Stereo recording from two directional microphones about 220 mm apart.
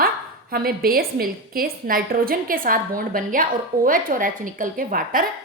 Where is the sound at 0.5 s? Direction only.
40° right (ahead or behind).